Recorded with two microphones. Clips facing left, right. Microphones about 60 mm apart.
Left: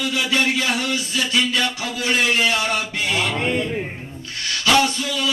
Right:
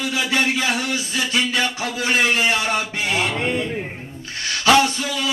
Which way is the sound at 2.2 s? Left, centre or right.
Right.